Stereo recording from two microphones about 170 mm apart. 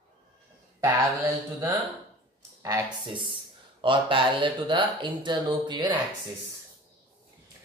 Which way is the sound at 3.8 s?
30° right (ahead or behind).